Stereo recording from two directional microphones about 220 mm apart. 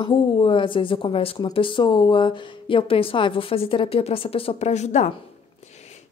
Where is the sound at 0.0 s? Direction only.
25° left (ahead or behind).